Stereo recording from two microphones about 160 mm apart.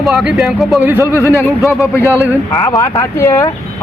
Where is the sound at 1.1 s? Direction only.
20° left (ahead or behind).